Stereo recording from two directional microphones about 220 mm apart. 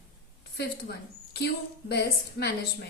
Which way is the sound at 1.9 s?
50° left (ahead or behind).